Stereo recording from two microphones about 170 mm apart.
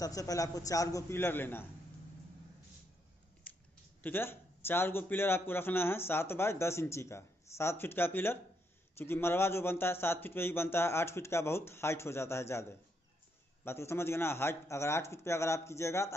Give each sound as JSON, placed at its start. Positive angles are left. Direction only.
{"t": 0.0, "sound": "a man's voice", "side_deg": 20}
{"t": 3.4, "sound": "a sound", "side_deg": 10}
{"t": 4.0, "sound": "a man's voice", "side_deg": 15}